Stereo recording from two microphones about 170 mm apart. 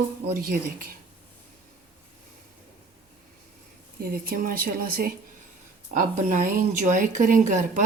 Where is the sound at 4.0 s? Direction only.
60° right (ahead or behind).